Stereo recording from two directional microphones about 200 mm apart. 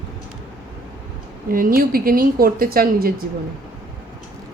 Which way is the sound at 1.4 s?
45° right (ahead or behind).